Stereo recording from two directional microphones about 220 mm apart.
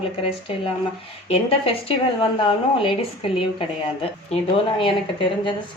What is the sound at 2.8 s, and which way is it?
Speech, 25° left (ahead or behind).